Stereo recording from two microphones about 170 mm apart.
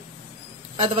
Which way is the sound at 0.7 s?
40° right (ahead or behind).